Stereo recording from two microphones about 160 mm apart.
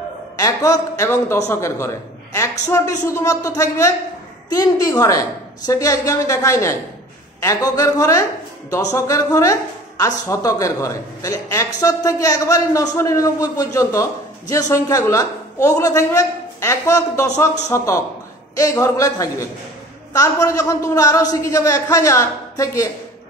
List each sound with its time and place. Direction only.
0.4 s a man's voice: 20° left (ahead or behind)